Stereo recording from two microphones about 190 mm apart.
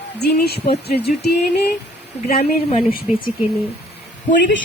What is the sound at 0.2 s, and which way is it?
Speech, 60° left (ahead or behind).